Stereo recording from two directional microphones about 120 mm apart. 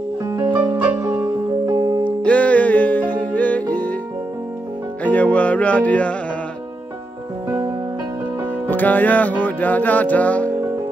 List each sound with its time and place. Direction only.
0.8 s music: 20° right (ahead or behind)
2.2 s music: 10° left (ahead or behind)
5.0 s music: 10° left (ahead or behind)
8.6 s music: 15° left (ahead or behind)